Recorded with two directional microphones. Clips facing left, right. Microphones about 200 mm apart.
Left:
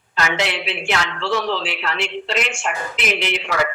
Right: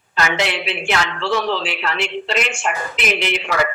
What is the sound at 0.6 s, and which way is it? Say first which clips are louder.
Speech: right 2 dB; 55° right (ahead or behind).